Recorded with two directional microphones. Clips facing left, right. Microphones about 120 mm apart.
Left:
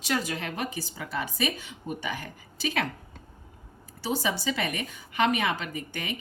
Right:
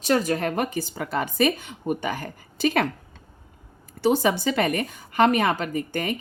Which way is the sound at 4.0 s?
55° right (ahead or behind).